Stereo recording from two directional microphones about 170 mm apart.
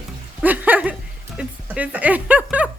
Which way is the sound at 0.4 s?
10° right (ahead or behind).